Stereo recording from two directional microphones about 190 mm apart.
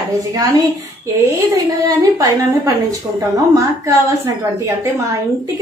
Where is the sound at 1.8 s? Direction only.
15° right (ahead or behind).